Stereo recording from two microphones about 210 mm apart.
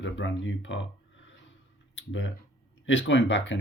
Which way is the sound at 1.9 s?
65° left (ahead or behind).